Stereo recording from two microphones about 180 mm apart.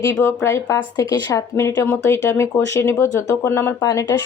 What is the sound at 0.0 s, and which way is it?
Speech, 15° left (ahead or behind).